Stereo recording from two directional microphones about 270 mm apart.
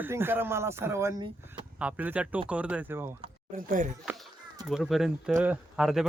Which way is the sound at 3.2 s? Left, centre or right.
Right.